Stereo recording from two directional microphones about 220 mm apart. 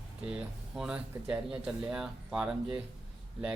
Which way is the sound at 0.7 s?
5° right (ahead or behind).